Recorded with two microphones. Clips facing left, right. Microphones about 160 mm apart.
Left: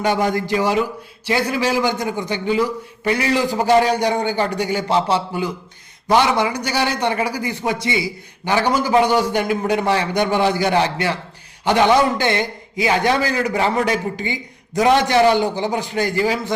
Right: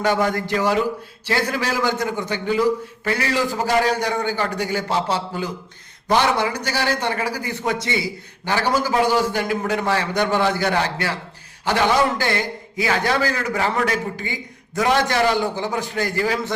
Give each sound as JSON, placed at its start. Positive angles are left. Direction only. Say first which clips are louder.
{"t": 0.0, "sound": "a man's voice", "louder": "left 1 dB", "side_deg": 15}